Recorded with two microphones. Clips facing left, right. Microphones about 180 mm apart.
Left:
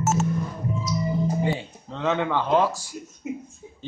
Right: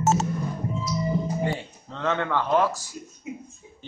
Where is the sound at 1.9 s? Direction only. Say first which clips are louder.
Left 2 dB; 15° left (ahead or behind).